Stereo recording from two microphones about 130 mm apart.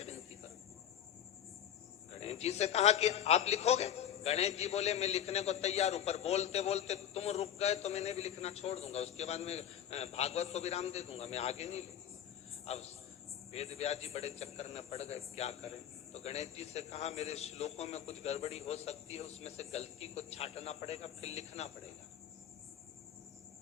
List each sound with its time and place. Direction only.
2.1 s a man's voice: 55° left (ahead or behind)